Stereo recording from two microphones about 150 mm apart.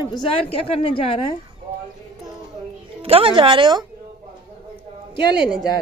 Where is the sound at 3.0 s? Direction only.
40° right (ahead or behind).